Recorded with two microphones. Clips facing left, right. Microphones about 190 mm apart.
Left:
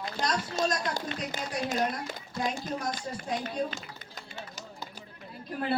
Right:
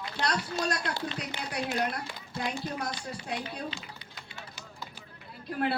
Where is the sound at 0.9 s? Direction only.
45° left (ahead or behind).